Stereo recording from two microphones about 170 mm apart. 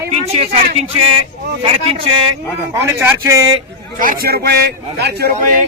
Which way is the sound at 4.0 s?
55° right (ahead or behind).